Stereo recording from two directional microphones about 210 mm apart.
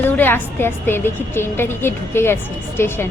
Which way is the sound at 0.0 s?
10° left (ahead or behind).